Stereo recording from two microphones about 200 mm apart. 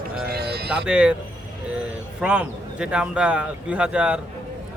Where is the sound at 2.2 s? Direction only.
5° right (ahead or behind).